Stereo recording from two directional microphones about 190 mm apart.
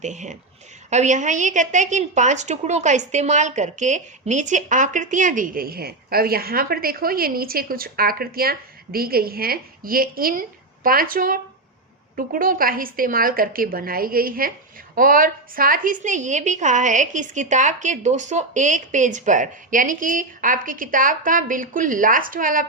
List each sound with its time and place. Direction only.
0.0 s a woman's voice: 40° right (ahead or behind)